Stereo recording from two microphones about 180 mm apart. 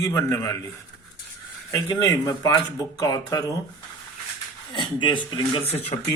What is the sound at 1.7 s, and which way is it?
Speech, 20° left (ahead or behind).